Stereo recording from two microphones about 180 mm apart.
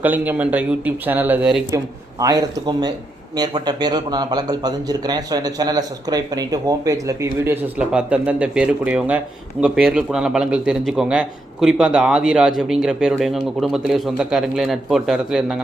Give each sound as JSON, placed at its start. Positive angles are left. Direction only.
{"t": 0.0, "sound": "speech", "side_deg": -10}
{"t": 1.7, "sound": "speech", "side_deg": -20}